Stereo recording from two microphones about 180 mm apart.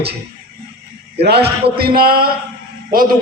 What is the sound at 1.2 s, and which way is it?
A man's voice, 65° right (ahead or behind).